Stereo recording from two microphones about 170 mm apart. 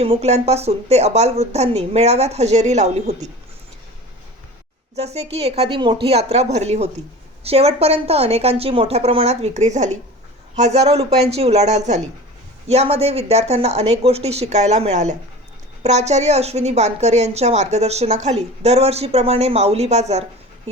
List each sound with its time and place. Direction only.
0.0 s a woman's voice: 35° right (ahead or behind)
4.9 s a woman's voice: 40° right (ahead or behind)